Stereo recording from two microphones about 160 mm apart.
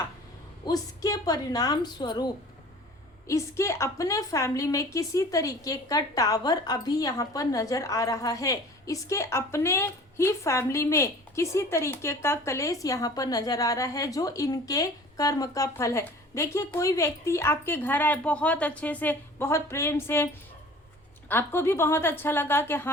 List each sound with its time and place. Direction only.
0.6 s a woman's voice: 25° left (ahead or behind)